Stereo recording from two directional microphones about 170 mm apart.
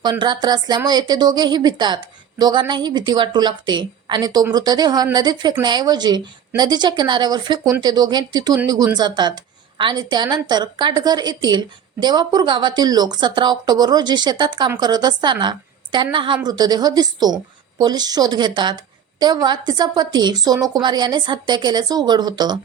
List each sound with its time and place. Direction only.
0.0 s a woman's voice: 25° right (ahead or behind)